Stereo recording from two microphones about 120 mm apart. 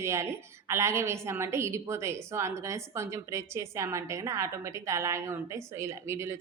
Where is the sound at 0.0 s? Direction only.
20° right (ahead or behind).